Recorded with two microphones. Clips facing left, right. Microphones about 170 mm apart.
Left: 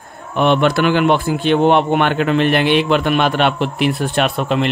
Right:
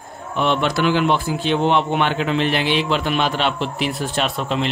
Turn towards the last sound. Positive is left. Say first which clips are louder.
# left 5 dB
turn(degrees=60)  # may be behind; listen again after turning